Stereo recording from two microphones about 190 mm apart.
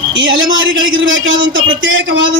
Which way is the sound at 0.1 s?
85° right.